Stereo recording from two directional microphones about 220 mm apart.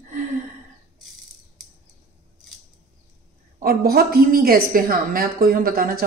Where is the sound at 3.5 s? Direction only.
45° right (ahead or behind).